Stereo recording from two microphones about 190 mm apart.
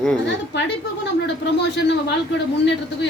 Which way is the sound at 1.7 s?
65° left (ahead or behind).